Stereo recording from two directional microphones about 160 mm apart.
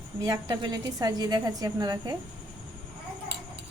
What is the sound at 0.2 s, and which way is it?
A woman's voice, 25° right (ahead or behind).